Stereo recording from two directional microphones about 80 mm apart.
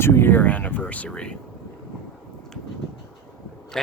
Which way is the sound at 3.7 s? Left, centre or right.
Centre.